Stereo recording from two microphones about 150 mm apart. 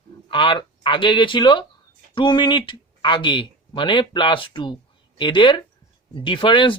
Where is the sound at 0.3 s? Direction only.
35° left (ahead or behind).